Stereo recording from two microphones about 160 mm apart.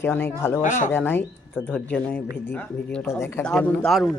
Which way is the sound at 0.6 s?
50° left (ahead or behind).